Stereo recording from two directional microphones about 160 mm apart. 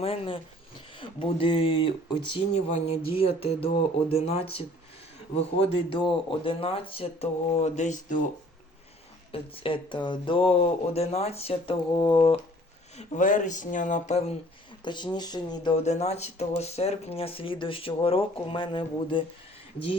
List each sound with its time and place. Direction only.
0.0 s speech: 35° left (ahead or behind)
9.3 s speech: 35° left (ahead or behind)
13.0 s speech: 55° left (ahead or behind)
14.8 s speech: 30° left (ahead or behind)
15.8 s speech: 45° left (ahead or behind)